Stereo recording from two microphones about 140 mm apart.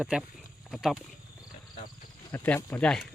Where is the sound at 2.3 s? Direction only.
15° left (ahead or behind).